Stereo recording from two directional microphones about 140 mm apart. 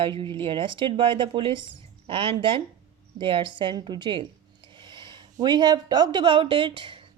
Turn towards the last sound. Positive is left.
turn(degrees=-40)  # may be behind; listen again after turning